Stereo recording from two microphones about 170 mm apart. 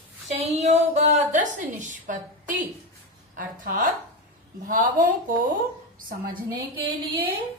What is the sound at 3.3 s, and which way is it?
A woman's voice, 55° right (ahead or behind).